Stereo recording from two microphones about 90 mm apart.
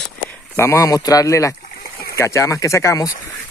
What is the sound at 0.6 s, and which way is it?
Speech, 30° left (ahead or behind).